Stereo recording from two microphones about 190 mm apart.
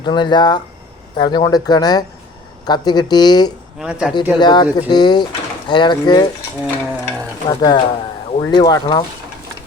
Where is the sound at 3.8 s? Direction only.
5° right (ahead or behind).